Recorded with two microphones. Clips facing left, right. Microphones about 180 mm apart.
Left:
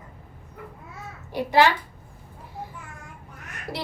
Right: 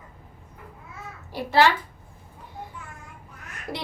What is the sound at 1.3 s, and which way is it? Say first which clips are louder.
Speech: left 1 dB; 15° left (ahead or behind).